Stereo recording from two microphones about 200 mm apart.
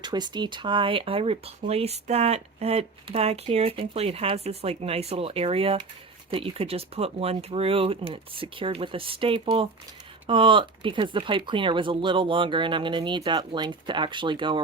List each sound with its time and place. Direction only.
0.0 s speech: 20° right (ahead or behind)